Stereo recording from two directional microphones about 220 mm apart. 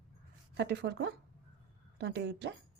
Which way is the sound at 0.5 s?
50° right (ahead or behind).